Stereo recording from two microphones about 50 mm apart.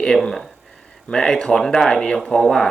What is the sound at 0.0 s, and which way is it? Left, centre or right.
Speech, centre.